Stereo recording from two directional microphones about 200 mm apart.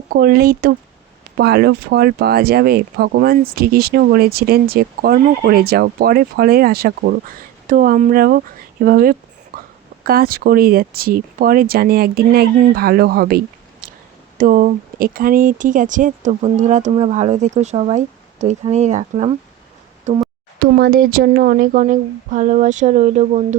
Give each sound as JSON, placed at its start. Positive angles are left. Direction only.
{"t": 0.1, "sound": "speech", "side_deg": -50}
{"t": 20.6, "sound": "speech", "side_deg": -50}